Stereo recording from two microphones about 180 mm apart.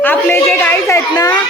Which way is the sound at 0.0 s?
10° left (ahead or behind).